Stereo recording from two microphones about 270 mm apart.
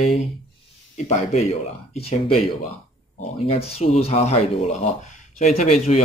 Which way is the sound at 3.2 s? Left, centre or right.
Left.